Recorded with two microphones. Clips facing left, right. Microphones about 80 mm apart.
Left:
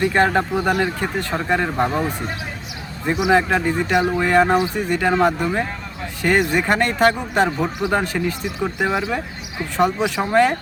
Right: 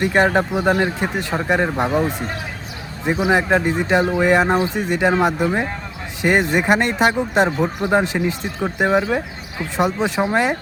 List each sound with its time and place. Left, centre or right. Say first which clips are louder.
0.0 s speech: right 1 dB; centre
3.3 s speech: left 1 dB; centre